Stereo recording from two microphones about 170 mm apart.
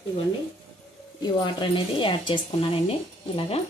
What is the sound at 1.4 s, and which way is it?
Speech, 30° left (ahead or behind).